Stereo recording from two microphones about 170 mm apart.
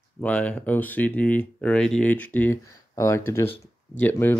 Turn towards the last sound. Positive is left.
turn(degrees=10)  # may be behind; listen again after turning